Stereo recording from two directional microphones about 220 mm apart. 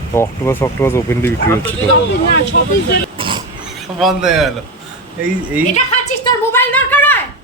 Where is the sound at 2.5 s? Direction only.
50° left (ahead or behind).